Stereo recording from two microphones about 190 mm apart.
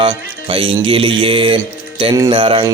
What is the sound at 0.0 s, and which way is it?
Mantra, 25° right (ahead or behind).